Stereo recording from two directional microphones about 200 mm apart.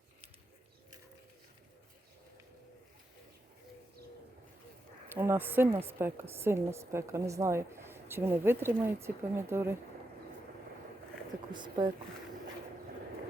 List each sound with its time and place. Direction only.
5.0 s a woman's voice: 10° right (ahead or behind)
11.5 s speech: 20° right (ahead or behind)